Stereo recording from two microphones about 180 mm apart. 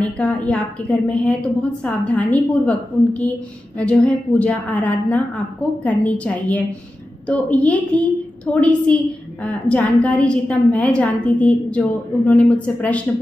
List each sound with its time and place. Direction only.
0.0 s a woman's voice: 5° left (ahead or behind)